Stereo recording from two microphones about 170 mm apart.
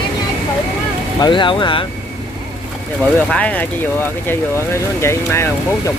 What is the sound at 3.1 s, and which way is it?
Speech, 5° left (ahead or behind).